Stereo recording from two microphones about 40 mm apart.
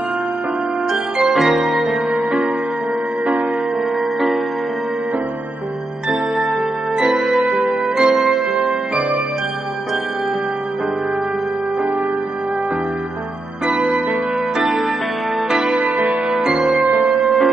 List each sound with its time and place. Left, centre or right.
0.8 s music: centre
6.0 s music: centre
13.7 s music: right
15.8 s music: right
16.4 s music: centre
16.8 s music: centre